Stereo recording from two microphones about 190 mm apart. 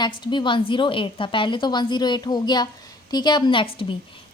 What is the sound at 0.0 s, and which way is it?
A woman's voice, 25° left (ahead or behind).